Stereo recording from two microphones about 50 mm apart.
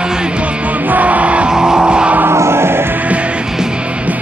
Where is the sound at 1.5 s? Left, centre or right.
Centre.